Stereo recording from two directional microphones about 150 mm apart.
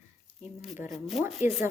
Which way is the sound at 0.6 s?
5° right (ahead or behind).